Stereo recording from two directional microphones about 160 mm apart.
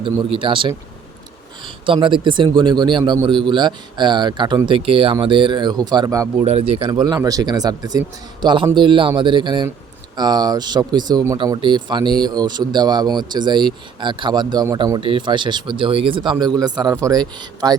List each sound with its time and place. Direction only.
0.0 s speech: 30° right (ahead or behind)
6.4 s speech: 45° right (ahead or behind); by 17.7 s 25° right (ahead or behind)